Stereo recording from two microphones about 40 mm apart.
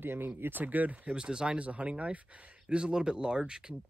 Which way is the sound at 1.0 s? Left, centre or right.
Right.